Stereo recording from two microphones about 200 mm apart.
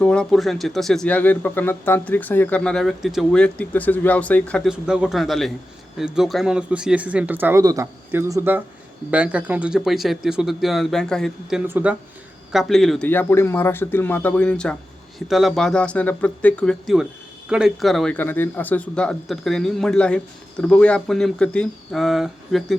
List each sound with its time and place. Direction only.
0.0 s speech: 5° left (ahead or behind)